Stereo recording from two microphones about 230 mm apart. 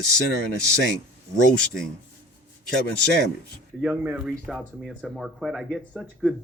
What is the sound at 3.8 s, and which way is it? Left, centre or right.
Speech, centre.